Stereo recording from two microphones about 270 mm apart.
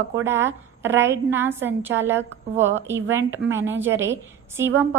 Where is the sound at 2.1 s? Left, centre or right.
Right.